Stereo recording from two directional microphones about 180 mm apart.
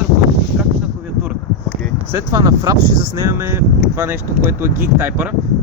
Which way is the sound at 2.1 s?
20° right (ahead or behind).